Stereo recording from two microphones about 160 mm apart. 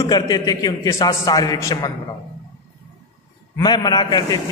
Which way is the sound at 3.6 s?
25° left (ahead or behind).